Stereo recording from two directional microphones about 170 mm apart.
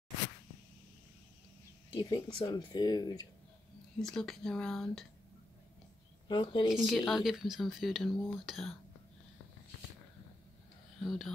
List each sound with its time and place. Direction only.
1.9 s speech: 30° left (ahead or behind)
4.0 s speech: 5° left (ahead or behind)
6.2 s speech: 25° left (ahead or behind)
6.7 s speech: centre (ahead or behind)
11.0 s speech: centre (ahead or behind)